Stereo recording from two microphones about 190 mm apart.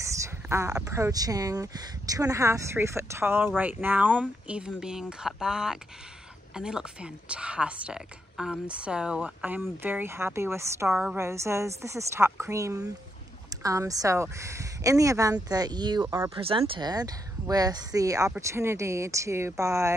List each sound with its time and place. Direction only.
0.0 s speech: 15° right (ahead or behind)
10.9 s a woman's voice: 5° right (ahead or behind)
11.1 s speech: 15° right (ahead or behind)